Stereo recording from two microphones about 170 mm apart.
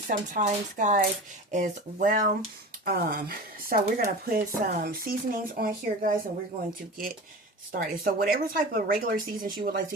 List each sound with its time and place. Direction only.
0.1 s speech: 50° right (ahead or behind)
2.8 s speech: 60° right (ahead or behind)
7.7 s speech: 60° right (ahead or behind)